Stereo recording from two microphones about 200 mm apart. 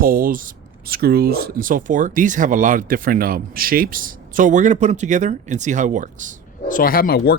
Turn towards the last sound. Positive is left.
turn(degrees=50)  # may be behind; listen again after turning